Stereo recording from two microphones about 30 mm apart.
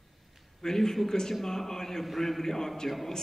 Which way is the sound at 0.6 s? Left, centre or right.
Centre.